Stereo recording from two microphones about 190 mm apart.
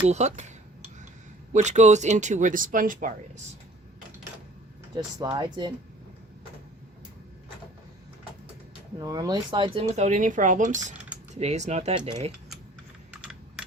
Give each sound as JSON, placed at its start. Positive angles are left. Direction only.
{"t": 0.1, "sound": "speech", "side_deg": -35}
{"t": 1.5, "sound": "speech", "side_deg": -35}
{"t": 4.9, "sound": "speech", "side_deg": -25}
{"t": 9.0, "sound": "speech", "side_deg": -20}